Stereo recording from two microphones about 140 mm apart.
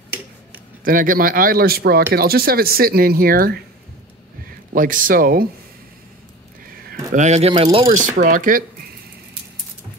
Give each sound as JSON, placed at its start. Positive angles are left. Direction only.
{"t": 0.8, "sound": "speech", "side_deg": -80}
{"t": 4.7, "sound": "speech", "side_deg": -80}
{"t": 7.1, "sound": "speech", "side_deg": -60}
{"t": 8.0, "sound": "speech", "side_deg": -65}